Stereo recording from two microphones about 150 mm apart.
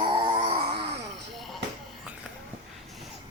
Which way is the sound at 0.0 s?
35° right (ahead or behind).